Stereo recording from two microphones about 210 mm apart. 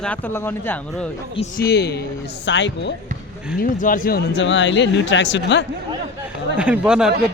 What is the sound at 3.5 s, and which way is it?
Speech, 40° left (ahead or behind).